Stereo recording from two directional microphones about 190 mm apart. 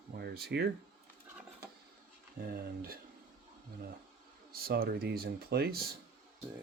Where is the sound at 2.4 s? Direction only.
50° right (ahead or behind).